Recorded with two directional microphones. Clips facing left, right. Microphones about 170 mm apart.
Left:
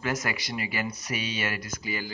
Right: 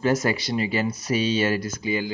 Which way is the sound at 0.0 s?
30° right (ahead or behind).